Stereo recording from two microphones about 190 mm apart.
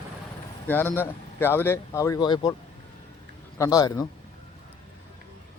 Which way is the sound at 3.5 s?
15° left (ahead or behind).